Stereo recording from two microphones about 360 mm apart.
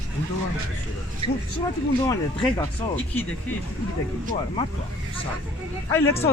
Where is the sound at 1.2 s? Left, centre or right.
Centre.